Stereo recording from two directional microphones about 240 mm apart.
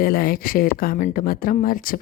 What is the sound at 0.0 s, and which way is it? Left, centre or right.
A woman's voice, left.